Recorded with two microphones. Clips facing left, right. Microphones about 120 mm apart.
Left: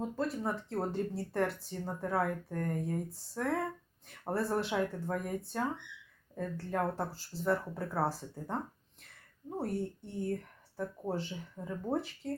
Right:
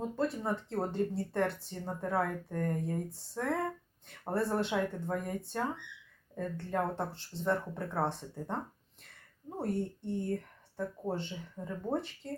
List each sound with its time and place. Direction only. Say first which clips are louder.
0.2 s speech: right 3 dB; centre (ahead or behind)
9.6 s speech: right 1 dB; centre (ahead or behind)